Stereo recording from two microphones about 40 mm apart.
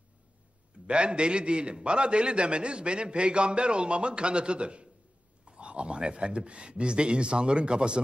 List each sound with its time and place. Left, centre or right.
0.8 s a man's voice: right